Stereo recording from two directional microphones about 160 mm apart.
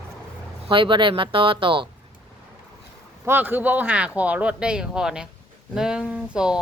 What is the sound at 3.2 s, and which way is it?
Speech, 10° right (ahead or behind).